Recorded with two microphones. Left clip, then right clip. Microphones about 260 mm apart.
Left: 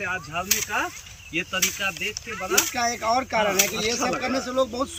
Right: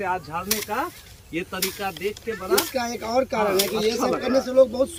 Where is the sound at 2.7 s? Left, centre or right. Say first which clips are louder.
Left 1 dB; centre.